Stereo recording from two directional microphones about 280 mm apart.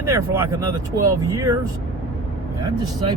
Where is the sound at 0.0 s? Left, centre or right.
Centre.